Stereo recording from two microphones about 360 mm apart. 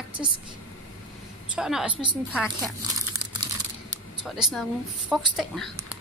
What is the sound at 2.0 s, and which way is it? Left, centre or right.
Speech, centre.